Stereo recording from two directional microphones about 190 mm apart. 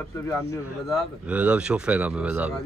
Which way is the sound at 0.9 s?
5° right (ahead or behind).